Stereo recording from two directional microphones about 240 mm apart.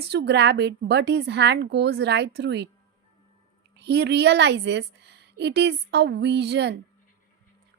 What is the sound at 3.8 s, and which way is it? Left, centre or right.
A woman's voice, right.